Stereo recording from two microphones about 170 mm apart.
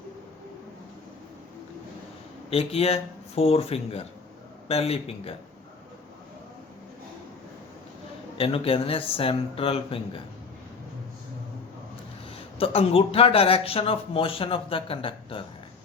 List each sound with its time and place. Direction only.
2.5 s speech: 35° left (ahead or behind)
8.4 s speech: 35° left (ahead or behind)
12.5 s speech: 35° left (ahead or behind)